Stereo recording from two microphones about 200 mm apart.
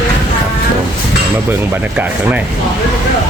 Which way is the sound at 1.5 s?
10° right (ahead or behind).